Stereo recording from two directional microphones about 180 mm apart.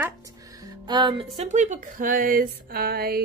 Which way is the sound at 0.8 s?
25° right (ahead or behind).